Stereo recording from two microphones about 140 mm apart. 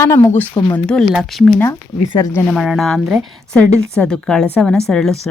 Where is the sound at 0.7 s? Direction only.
5° left (ahead or behind).